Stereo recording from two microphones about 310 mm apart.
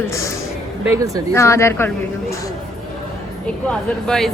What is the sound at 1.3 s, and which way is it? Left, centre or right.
Speech, centre.